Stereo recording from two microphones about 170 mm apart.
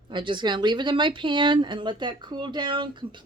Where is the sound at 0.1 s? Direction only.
30° right (ahead or behind).